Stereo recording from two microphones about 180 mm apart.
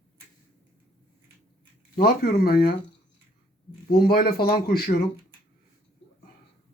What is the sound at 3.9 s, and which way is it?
Speech, 55° left (ahead or behind).